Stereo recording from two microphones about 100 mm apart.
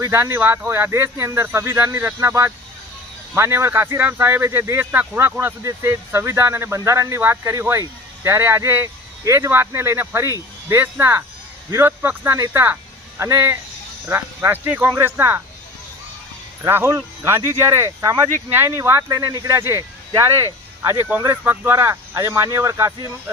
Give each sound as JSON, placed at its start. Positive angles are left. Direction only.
{"t": 0.0, "sound": "speech", "side_deg": -30}
{"t": 16.6, "sound": "speech", "side_deg": -20}